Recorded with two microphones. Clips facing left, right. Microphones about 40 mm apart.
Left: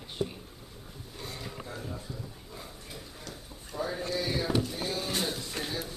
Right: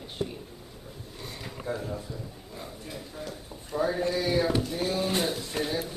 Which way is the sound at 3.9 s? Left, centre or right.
Centre.